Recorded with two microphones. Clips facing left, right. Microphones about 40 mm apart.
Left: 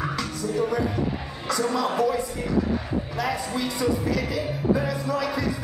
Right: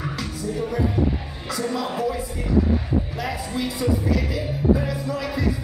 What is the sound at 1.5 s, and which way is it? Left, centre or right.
Speech, centre.